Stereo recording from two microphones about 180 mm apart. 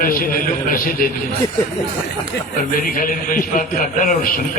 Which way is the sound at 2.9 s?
50° left (ahead or behind).